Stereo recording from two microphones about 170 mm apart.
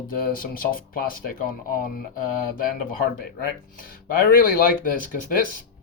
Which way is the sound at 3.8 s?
55° left (ahead or behind).